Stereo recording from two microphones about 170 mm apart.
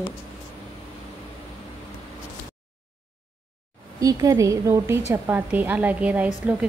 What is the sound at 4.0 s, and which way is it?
A woman's voice, 20° right (ahead or behind).